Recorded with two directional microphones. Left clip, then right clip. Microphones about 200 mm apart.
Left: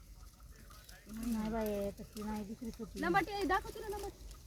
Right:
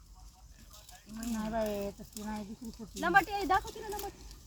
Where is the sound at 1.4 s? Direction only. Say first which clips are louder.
Right 5 dB; 30° right (ahead or behind).